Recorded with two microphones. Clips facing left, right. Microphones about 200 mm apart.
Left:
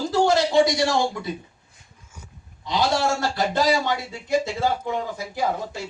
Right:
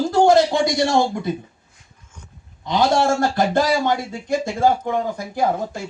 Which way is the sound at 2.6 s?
50° right (ahead or behind).